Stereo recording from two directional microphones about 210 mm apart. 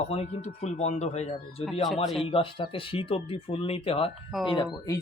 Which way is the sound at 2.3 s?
25° left (ahead or behind).